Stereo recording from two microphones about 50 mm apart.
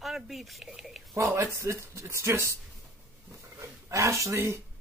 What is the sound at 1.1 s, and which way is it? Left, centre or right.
Speech, right.